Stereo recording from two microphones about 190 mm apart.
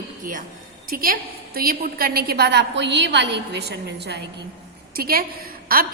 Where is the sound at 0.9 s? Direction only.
50° right (ahead or behind).